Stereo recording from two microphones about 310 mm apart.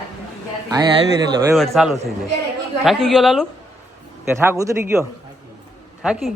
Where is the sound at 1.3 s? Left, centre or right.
Centre.